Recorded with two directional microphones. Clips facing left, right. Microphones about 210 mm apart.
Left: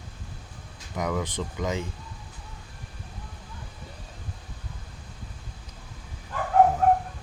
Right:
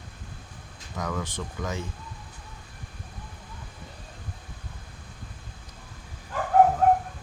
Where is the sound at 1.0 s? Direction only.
15° left (ahead or behind).